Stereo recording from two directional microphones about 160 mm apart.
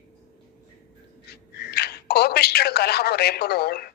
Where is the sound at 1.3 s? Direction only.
90° left.